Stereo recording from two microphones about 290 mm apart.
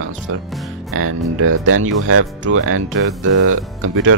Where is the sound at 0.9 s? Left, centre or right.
Right.